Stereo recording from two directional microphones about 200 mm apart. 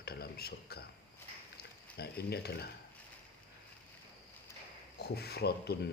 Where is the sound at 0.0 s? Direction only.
50° left (ahead or behind).